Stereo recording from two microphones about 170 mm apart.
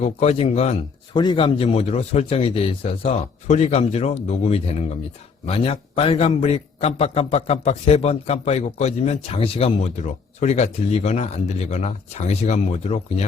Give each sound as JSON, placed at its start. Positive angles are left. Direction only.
{"t": 0.0, "sound": "a man's voice", "side_deg": 40}
{"t": 1.2, "sound": "a man's voice", "side_deg": 30}